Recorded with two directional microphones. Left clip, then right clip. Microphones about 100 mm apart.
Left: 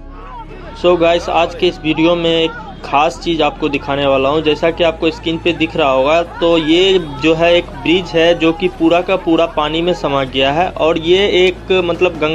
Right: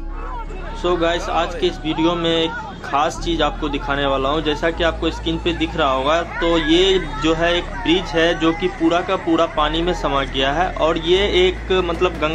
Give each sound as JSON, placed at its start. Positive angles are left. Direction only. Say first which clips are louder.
{"t": 0.8, "sound": "speech", "louder": "left 8 dB", "side_deg": 50}